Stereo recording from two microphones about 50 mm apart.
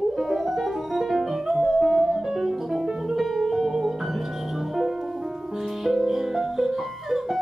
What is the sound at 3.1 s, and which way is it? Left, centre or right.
Music, centre.